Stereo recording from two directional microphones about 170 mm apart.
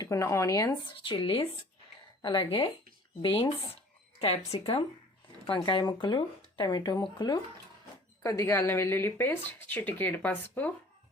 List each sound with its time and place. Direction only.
0.0 s speech: 20° left (ahead or behind); by 4.8 s 35° left (ahead or behind)
5.5 s speech: 25° left (ahead or behind)